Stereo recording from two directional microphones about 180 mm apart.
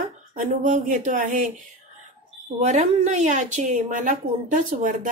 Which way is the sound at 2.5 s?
40° right (ahead or behind).